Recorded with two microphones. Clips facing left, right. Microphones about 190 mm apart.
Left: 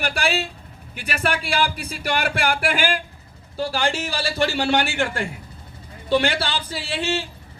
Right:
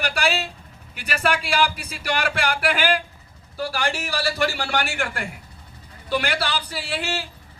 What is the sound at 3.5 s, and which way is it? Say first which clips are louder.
Speech: left 3 dB; 25° left (ahead or behind).